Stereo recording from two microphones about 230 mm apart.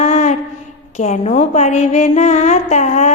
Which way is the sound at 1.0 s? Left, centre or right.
Left.